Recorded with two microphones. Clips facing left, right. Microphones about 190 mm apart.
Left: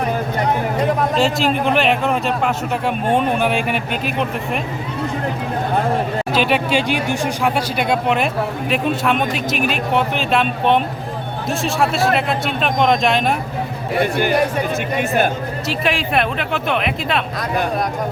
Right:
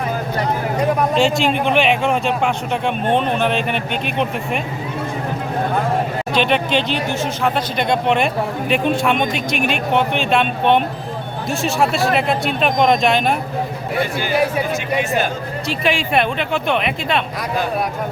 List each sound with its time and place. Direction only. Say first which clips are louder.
1.1 s a man's voice: right 1 dB; centre (ahead or behind)
6.3 s a man's voice: even; 5° left (ahead or behind)
14.0 s speech: left 5 dB; 55° left (ahead or behind)
15.8 s a man's voice: right 2 dB; centre (ahead or behind)